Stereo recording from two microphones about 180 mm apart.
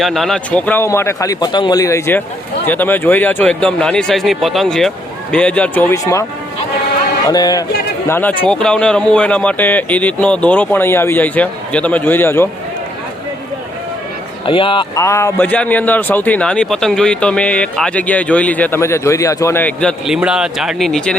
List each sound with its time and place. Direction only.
0.0 s a man's voice: centre (ahead or behind)
7.3 s a man's voice: 20° left (ahead or behind)
14.4 s speech: 30° left (ahead or behind)
15.0 s a man's voice: 15° left (ahead or behind)